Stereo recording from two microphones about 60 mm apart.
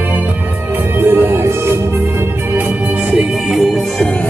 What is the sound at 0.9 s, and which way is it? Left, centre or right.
Music, right.